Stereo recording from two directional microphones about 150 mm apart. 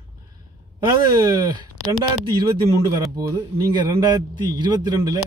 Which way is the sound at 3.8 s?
30° right (ahead or behind).